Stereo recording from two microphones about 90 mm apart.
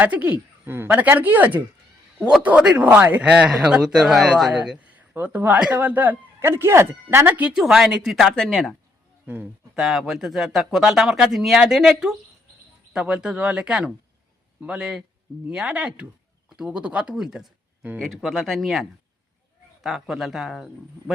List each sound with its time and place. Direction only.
0.0 s a man's voice: 15° right (ahead or behind)
7.5 s speech: 5° right (ahead or behind)
9.2 s a man's voice: 20° right (ahead or behind)
9.7 s a man's voice: 5° right (ahead or behind)